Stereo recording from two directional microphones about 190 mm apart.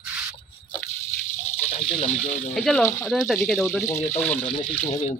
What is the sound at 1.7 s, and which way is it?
Speech, 35° left (ahead or behind).